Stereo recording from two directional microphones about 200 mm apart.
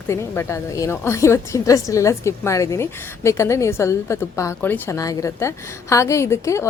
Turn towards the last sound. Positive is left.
turn(degrees=15)  # may be behind; listen again after turning